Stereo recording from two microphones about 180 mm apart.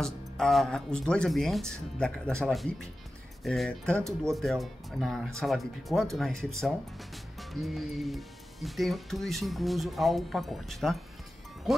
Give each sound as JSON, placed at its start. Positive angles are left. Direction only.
{"t": 0.0, "sound": "speech", "side_deg": 0}